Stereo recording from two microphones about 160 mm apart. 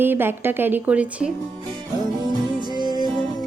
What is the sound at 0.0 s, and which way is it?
A woman's voice, 15° right (ahead or behind).